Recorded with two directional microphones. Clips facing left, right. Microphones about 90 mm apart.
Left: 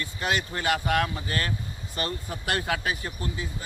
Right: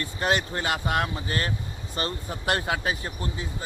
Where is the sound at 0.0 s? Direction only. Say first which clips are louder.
Right 3 dB; 35° right (ahead or behind).